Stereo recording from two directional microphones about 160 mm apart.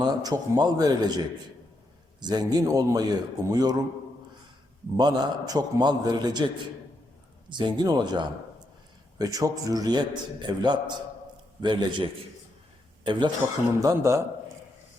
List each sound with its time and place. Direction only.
0.0 s a man's voice: 25° right (ahead or behind)
2.2 s a man's voice: 25° right (ahead or behind)
4.9 s a man's voice: 25° right (ahead or behind)
7.5 s a man's voice: 25° right (ahead or behind)
13.1 s a man's voice: 30° right (ahead or behind)
13.7 s a man's voice: 20° right (ahead or behind)